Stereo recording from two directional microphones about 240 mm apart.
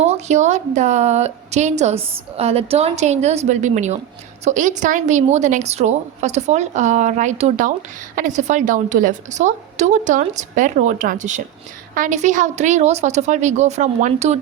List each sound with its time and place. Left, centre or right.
0.0 s a woman's voice: right